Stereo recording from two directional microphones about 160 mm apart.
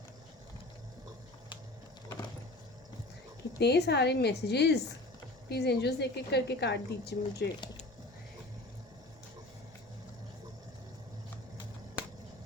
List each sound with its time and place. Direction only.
3.6 s a woman's voice: 90° left